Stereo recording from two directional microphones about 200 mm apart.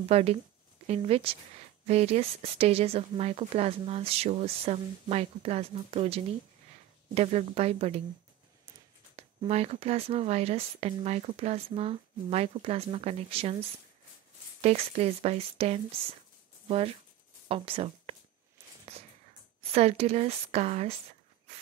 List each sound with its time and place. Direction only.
0.1 s speech: 30° right (ahead or behind)
9.1 s speech: 30° right (ahead or behind)
14.6 s speech: 35° right (ahead or behind)
19.6 s speech: 30° right (ahead or behind)